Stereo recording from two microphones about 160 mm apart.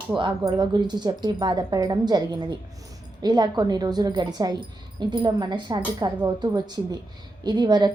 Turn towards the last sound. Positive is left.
turn(degrees=-25)  # may be behind; listen again after turning